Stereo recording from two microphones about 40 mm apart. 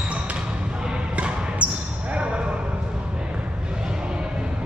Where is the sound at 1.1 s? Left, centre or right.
Right.